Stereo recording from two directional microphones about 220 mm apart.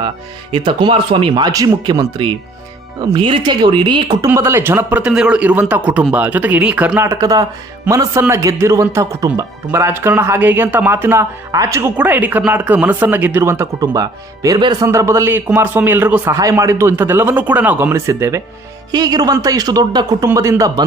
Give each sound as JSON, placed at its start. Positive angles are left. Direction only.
{"t": 0.0, "sound": "a man's voice", "side_deg": -20}